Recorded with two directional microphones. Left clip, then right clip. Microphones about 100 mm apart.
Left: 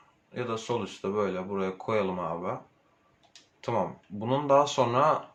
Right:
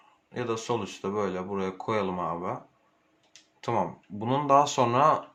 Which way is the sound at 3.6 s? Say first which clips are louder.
Right 1 dB; 50° right (ahead or behind).